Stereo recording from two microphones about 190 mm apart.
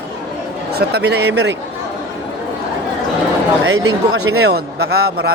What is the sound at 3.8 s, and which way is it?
A man's voice, 90° right.